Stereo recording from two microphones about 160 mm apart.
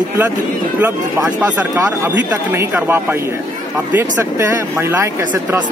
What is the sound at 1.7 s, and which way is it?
Speech, 15° right (ahead or behind).